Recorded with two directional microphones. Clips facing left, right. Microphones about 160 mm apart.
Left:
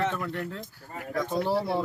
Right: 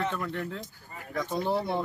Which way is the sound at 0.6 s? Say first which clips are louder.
Left 5 dB; 70° left (ahead or behind).